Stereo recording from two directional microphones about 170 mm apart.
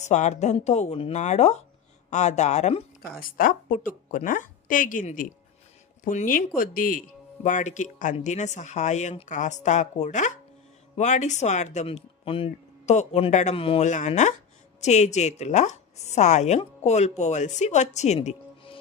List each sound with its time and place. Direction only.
0.0 s a woman's voice: 45° left (ahead or behind)
3.0 s a woman's voice: 60° left (ahead or behind); by 18.8 s 35° left (ahead or behind)